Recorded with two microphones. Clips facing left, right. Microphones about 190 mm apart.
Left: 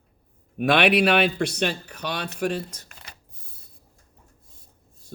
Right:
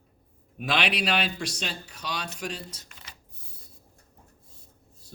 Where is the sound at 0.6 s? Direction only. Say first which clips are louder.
Left 9 dB; 55° left (ahead or behind).